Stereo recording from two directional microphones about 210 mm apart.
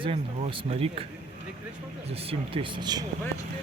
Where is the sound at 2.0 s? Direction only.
30° right (ahead or behind).